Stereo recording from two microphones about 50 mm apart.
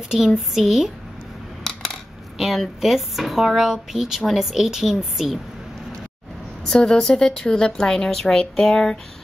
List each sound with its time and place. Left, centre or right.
0.5 s speech: centre
1.6 s coin: centre
2.3 s speech: centre
6.6 s a woman's voice: centre